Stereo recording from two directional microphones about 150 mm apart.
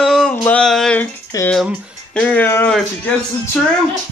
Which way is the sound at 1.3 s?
20° left (ahead or behind).